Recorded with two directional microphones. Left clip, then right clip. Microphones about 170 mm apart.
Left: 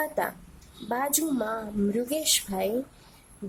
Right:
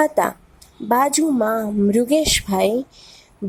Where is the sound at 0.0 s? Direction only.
25° right (ahead or behind).